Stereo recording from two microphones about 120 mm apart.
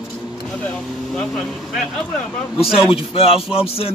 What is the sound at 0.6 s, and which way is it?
Speech, 5° left (ahead or behind).